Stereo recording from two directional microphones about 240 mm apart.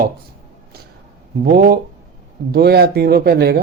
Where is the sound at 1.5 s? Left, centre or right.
Right.